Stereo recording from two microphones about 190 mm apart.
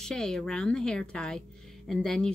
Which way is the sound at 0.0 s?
5° left (ahead or behind).